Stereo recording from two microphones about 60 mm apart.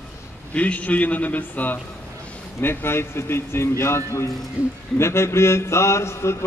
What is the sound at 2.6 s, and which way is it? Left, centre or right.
Speech, left.